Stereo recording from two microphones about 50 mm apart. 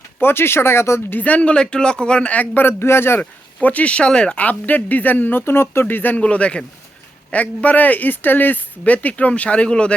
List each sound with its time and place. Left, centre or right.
0.2 s speech: left
1.1 s speech: left
2.6 s speech: left
3.2 s speech: left; by 4.4 s centre
4.4 s speech: left
5.8 s speech: left
6.1 s speech: left
8.8 s speech: left